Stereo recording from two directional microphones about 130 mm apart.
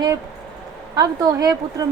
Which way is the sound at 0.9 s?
30° right (ahead or behind).